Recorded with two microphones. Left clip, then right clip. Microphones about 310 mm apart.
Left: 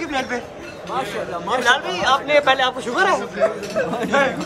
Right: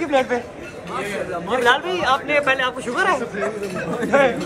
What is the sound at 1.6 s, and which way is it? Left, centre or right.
A man's voice, centre.